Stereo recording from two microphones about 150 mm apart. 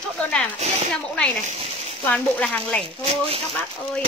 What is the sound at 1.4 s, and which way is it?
Speech, 45° right (ahead or behind).